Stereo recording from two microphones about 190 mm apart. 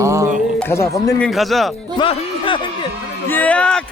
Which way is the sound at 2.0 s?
25° left (ahead or behind).